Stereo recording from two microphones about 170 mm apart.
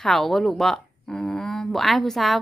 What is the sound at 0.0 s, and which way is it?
Speech, centre (ahead or behind).